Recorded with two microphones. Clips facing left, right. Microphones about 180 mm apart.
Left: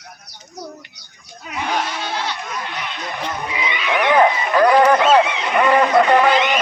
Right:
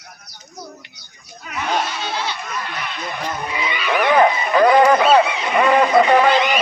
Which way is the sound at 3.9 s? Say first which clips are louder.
Even; 5° right (ahead or behind).